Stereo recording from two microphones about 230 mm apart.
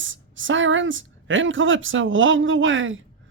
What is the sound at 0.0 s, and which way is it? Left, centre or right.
A woman's voice, right.